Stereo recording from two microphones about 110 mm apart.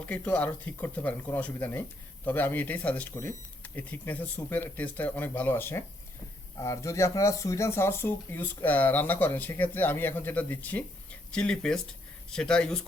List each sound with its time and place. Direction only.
0.0 s speech: 15° left (ahead or behind)